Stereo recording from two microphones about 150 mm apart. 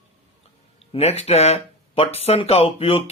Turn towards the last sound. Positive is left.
turn(degrees=40)  # may be behind; listen again after turning